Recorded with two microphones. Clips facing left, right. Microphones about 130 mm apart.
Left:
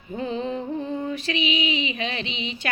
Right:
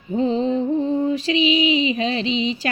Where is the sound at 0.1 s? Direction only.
30° right (ahead or behind).